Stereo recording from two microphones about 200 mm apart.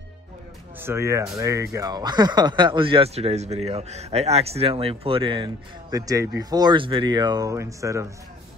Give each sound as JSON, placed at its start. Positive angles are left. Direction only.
{"t": 0.7, "sound": "speech", "side_deg": -10}